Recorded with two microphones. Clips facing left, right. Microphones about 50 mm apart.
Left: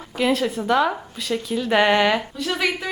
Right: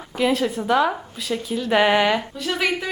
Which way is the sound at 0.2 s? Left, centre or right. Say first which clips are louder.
Even; centre.